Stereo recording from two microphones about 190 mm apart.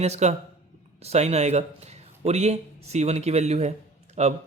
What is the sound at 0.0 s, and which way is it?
Speech, 35° right (ahead or behind).